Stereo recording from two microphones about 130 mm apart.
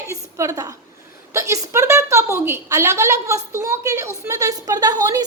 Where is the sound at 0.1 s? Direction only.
25° right (ahead or behind).